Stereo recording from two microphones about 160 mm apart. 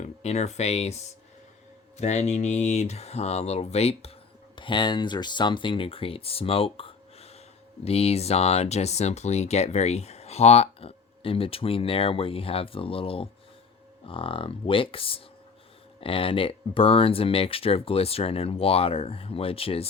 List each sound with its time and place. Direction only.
0.0 s speech: 45° left (ahead or behind)
4.5 s speech: 30° left (ahead or behind)
6.7 s a sound: 35° left (ahead or behind)
7.9 s speech: 40° left (ahead or behind)